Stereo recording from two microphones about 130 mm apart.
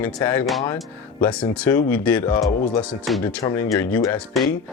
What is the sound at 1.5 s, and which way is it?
Speech, 10° left (ahead or behind).